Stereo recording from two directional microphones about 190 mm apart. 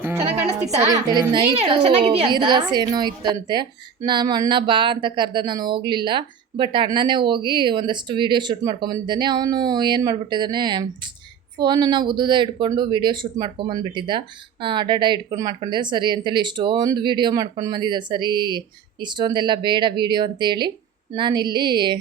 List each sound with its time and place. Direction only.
0.0 s music: 10° right (ahead or behind)
0.8 s a woman's voice: 20° right (ahead or behind)